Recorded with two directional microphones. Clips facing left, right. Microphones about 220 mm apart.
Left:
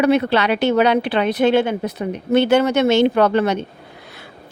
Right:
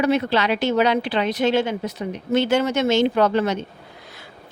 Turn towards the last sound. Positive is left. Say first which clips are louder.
# left 3 dB
turn(degrees=65)  # may be behind; listen again after turning